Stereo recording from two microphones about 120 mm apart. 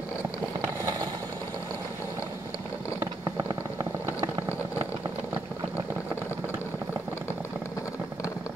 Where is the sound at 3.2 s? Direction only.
40° right (ahead or behind).